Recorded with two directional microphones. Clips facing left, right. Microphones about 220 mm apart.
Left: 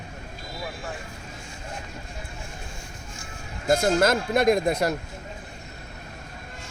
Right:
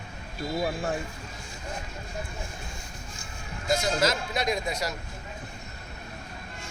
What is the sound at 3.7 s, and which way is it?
Speech, 55° left (ahead or behind).